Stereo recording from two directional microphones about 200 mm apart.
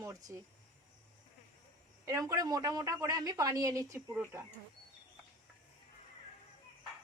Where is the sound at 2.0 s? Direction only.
15° right (ahead or behind).